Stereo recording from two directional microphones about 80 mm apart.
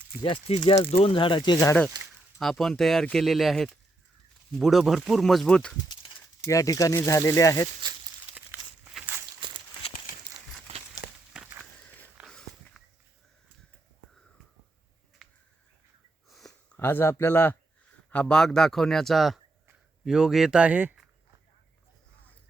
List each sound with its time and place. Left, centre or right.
0.2 s speech: left
2.4 s speech: centre
6.4 s speech: left
8.4 s a sound: right
9.4 s walk: right
11.3 s a sound: centre
12.2 s walk: centre
16.3 s a sound: centre
16.7 s speech: left
18.1 s speech: centre